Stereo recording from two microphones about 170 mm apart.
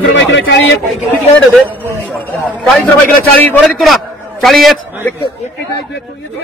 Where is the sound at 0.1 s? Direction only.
90° left.